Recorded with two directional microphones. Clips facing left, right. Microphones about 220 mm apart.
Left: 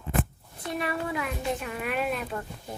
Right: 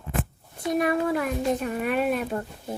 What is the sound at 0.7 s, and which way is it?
Speech, 45° right (ahead or behind).